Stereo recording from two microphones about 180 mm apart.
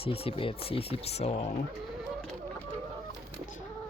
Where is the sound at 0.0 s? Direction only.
30° left (ahead or behind).